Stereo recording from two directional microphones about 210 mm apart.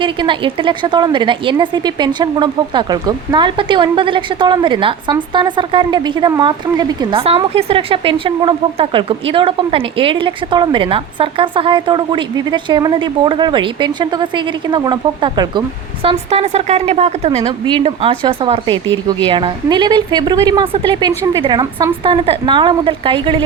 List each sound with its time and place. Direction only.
0.0 s speech: 25° right (ahead or behind)